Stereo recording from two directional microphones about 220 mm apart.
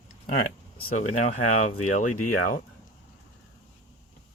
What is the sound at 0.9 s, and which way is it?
Speech, 35° left (ahead or behind).